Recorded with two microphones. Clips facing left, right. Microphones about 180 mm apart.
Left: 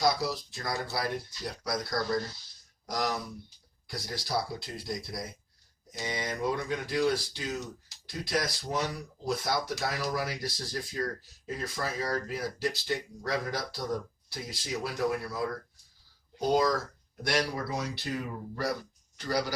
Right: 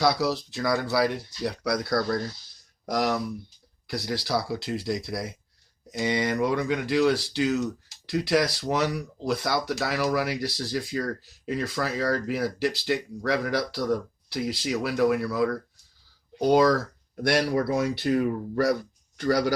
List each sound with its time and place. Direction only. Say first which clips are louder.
0.0 s speech: right 5 dB; 70° right (ahead or behind)
17.2 s speech: right 7 dB; 60° right (ahead or behind)